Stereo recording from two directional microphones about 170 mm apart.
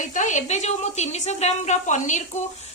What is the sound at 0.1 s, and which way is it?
A woman's voice, 45° left (ahead or behind).